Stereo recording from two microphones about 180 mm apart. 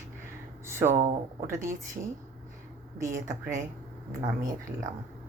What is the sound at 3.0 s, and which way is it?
Speech, 15° right (ahead or behind).